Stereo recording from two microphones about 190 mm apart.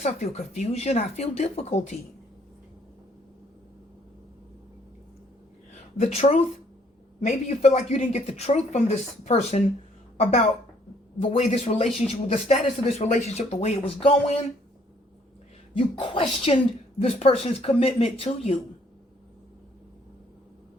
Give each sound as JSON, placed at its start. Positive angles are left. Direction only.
{"t": 0.0, "sound": "speech", "side_deg": 35}
{"t": 5.7, "sound": "speech", "side_deg": 35}
{"t": 11.2, "sound": "speech", "side_deg": 35}
{"t": 15.7, "sound": "speech", "side_deg": 25}